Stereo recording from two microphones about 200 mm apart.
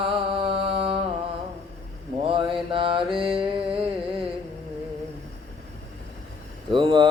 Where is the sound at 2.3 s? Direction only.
25° right (ahead or behind).